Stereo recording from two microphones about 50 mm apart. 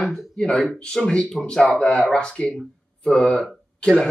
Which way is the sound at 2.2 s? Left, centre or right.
Left.